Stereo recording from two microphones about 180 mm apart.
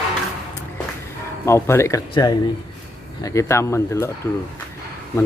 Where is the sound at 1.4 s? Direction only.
15° left (ahead or behind).